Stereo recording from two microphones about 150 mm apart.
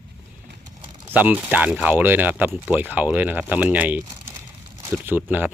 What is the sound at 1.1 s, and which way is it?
Speech, 10° right (ahead or behind).